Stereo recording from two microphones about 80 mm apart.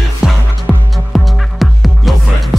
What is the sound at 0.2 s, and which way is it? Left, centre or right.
Music, centre.